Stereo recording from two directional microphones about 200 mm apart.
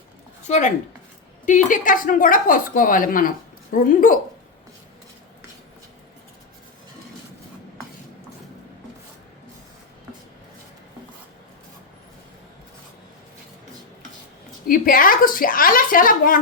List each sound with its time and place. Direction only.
0.4 s a woman's voice: 35° left (ahead or behind)
14.7 s a woman's voice: 45° left (ahead or behind)